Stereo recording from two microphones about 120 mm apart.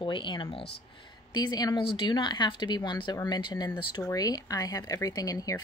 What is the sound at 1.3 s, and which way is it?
Speech, 35° left (ahead or behind).